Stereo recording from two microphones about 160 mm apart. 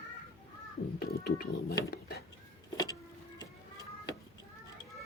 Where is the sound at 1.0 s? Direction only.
75° left (ahead or behind).